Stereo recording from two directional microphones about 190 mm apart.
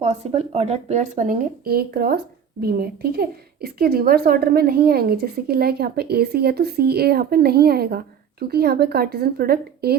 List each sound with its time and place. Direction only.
0.0 s speech: 35° right (ahead or behind); by 10.0 s 55° right (ahead or behind)